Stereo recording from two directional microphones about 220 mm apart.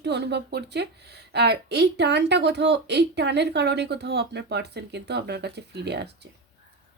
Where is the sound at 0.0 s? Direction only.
50° right (ahead or behind).